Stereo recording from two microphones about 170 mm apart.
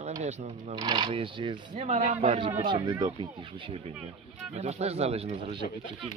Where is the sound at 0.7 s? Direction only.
25° right (ahead or behind).